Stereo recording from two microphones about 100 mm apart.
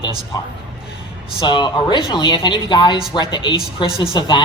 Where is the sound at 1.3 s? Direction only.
50° left (ahead or behind).